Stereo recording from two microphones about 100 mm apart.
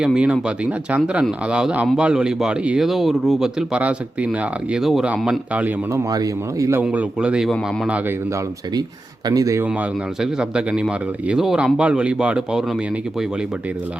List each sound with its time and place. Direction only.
0.0 s speech: 10° right (ahead or behind)
5.9 s speech: 35° right (ahead or behind)
6.8 s speech: 10° right (ahead or behind)
9.2 s speech: 35° right (ahead or behind)
9.6 s speech: 10° right (ahead or behind)